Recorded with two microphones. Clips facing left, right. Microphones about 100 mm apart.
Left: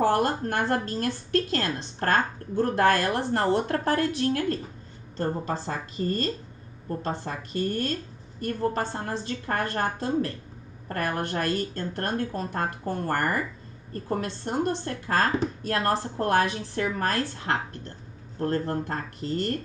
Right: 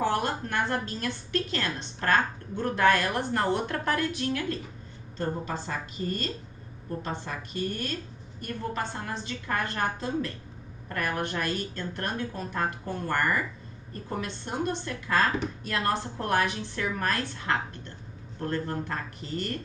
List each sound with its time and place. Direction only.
0.0 s a woman's voice: 40° left (ahead or behind)